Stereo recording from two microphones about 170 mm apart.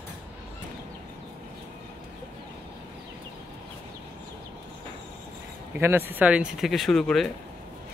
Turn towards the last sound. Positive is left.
turn(degrees=0)  # may be behind; listen again after turning